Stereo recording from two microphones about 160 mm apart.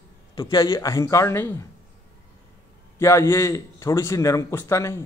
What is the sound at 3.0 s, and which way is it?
A man's voice, 15° left (ahead or behind).